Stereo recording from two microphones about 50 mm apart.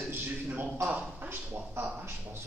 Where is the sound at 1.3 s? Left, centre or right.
Right.